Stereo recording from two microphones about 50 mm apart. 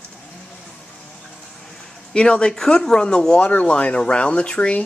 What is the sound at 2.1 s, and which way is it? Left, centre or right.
Speech, centre.